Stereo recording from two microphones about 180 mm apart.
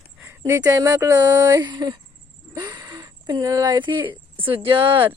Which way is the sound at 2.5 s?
20° right (ahead or behind).